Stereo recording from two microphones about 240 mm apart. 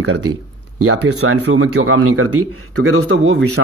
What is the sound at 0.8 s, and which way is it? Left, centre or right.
Speech, right.